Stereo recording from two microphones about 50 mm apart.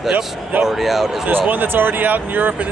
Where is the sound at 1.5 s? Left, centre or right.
Right.